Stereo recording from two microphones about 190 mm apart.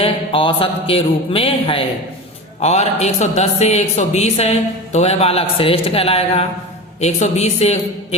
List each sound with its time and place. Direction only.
0.0 s a man's voice: 25° left (ahead or behind)